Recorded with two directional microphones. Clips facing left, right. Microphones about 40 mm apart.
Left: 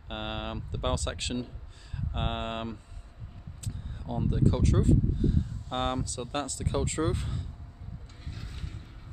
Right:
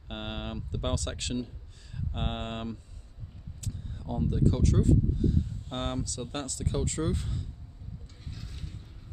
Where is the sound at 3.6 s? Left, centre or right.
Centre.